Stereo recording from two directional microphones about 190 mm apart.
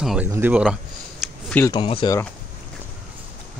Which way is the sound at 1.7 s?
25° left (ahead or behind).